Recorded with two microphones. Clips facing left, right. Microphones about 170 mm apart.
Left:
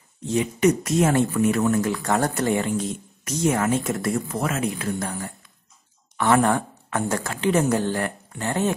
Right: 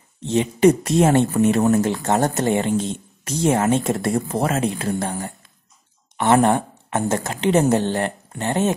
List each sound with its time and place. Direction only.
0.2 s speech: 25° right (ahead or behind)
6.1 s speech: 20° right (ahead or behind)